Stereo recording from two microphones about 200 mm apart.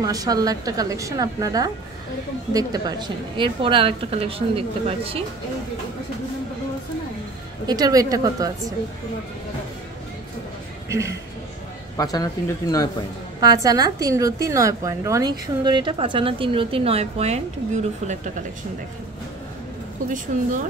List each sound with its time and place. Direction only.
0.0 s a woman's voice: 20° right (ahead or behind)
7.6 s a woman's voice: 20° right (ahead or behind)
10.9 s a man's voice: 15° right (ahead or behind)
12.0 s speech: 20° left (ahead or behind)
13.4 s a woman's voice: 20° right (ahead or behind)
20.3 s speech: 40° right (ahead or behind)